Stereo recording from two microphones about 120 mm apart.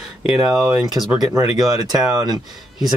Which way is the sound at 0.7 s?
Centre (ahead or behind).